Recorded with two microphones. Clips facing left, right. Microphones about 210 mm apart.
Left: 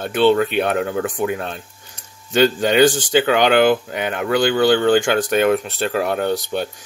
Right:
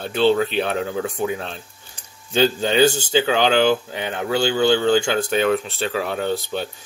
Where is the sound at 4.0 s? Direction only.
65° left (ahead or behind).